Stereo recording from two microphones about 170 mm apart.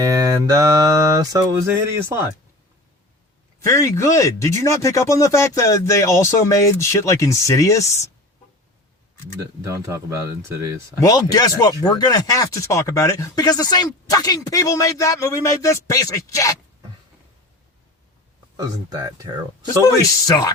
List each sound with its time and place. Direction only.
0.0 s mantra: 20° right (ahead or behind)
3.6 s speech: 20° left (ahead or behind)
9.6 s speech: 15° right (ahead or behind)
11.0 s speech: 20° left (ahead or behind)
18.5 s speech: 20° right (ahead or behind)
19.8 s speech: 20° left (ahead or behind)